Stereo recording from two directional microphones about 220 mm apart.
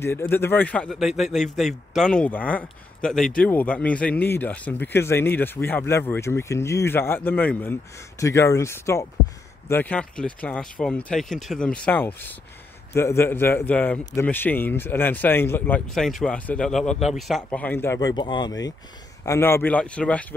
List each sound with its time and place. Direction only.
0.0 s speech: 10° left (ahead or behind)